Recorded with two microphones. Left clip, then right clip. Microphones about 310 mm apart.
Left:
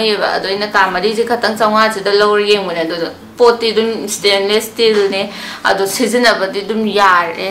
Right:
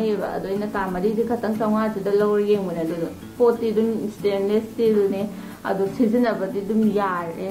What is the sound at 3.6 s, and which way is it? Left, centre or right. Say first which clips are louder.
A woman's voice: left 8 dB; centre.